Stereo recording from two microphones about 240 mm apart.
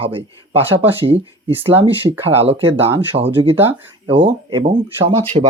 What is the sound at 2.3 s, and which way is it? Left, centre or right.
Speech, right.